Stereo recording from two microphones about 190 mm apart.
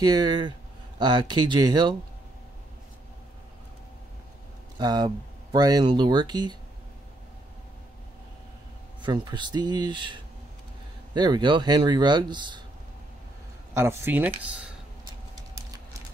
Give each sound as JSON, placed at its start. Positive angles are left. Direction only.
{"t": 0.0, "sound": "speech", "side_deg": -20}
{"t": 4.7, "sound": "speech", "side_deg": -20}
{"t": 9.0, "sound": "speech", "side_deg": -20}
{"t": 13.7, "sound": "speech", "side_deg": -15}